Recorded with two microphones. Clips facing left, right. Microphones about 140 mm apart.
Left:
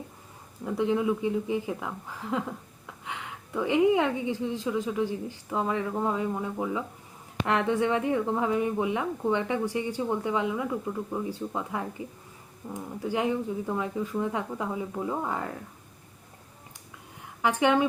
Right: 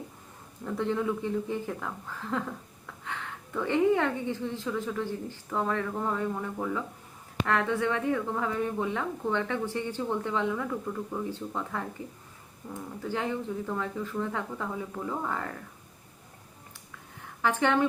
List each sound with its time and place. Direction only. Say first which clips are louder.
0.6 s a woman's voice: left 3 dB; 15° left (ahead or behind)
17.4 s a woman's voice: left 2 dB; 15° left (ahead or behind)